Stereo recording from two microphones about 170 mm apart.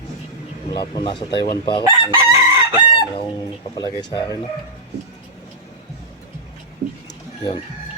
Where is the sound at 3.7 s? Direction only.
25° left (ahead or behind).